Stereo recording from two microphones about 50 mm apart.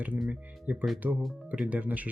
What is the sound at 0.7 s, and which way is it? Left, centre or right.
Speech, right.